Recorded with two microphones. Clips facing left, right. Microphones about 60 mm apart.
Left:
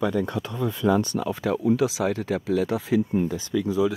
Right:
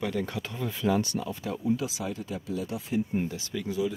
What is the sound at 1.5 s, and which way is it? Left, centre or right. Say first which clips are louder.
Speech: left 7 dB; left.